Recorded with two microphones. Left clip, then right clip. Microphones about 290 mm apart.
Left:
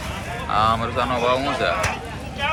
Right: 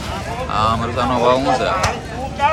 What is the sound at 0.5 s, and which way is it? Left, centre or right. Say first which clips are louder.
Speech: right 1 dB; centre.